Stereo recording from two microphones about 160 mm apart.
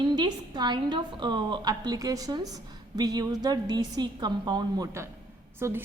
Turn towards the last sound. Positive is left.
turn(degrees=-15)  # may be behind; listen again after turning